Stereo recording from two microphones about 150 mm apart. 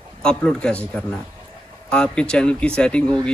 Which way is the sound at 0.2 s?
5° left (ahead or behind).